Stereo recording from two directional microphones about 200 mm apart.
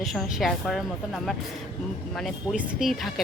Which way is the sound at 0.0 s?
Centre (ahead or behind).